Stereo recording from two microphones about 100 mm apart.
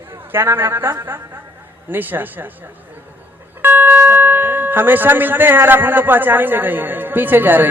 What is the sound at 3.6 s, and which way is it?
Speech, 20° right (ahead or behind).